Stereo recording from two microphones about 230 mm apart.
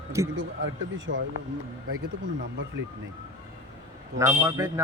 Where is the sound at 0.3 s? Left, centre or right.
Right.